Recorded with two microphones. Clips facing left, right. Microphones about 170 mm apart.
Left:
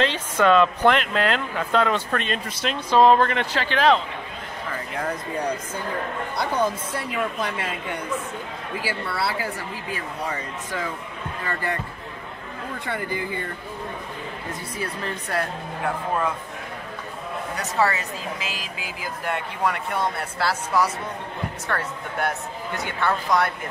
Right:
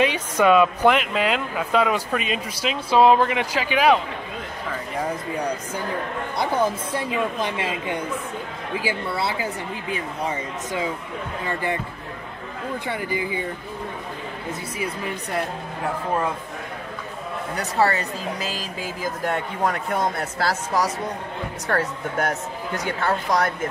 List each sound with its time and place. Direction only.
0.0 s speech: 10° right (ahead or behind)
8.7 s speech: 20° right (ahead or behind)
12.8 s speech: 15° right (ahead or behind)
14.5 s speech: 10° right (ahead or behind)
17.6 s speech: 35° right (ahead or behind)